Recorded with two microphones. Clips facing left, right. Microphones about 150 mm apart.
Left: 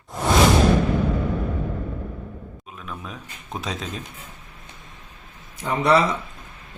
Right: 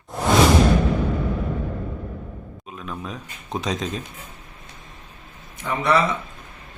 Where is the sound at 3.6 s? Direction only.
5° left (ahead or behind).